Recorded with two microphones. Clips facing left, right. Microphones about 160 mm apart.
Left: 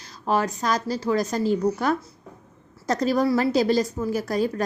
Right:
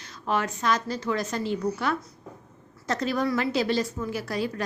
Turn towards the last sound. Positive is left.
turn(degrees=45)  # may be behind; listen again after turning